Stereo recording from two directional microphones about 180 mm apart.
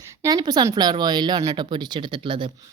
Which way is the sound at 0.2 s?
20° right (ahead or behind).